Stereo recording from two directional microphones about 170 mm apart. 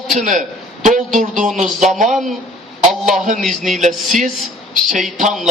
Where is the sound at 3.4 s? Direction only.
Centre (ahead or behind).